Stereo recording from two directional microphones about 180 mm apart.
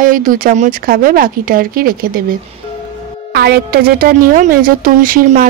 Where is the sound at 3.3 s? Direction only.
60° right (ahead or behind).